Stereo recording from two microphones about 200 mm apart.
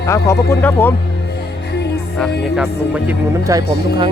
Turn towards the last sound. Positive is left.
turn(degrees=-15)  # may be behind; listen again after turning